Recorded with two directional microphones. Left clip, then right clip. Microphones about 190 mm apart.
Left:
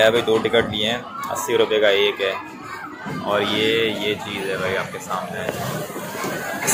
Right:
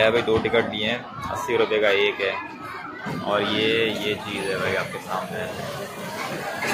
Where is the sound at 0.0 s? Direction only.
10° left (ahead or behind).